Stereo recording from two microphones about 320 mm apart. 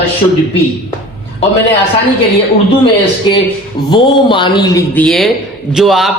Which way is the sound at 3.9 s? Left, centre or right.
Centre.